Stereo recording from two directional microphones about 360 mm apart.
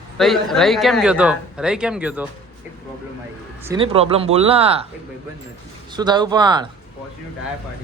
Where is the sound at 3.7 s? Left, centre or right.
Centre.